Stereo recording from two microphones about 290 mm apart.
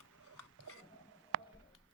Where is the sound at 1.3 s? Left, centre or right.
Right.